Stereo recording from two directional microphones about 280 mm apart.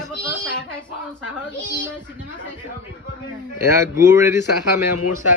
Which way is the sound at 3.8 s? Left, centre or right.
Centre.